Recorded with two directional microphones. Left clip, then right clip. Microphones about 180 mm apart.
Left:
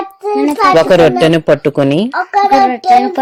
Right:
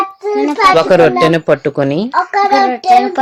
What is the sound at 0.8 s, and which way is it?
A child's voice, 45° left (ahead or behind).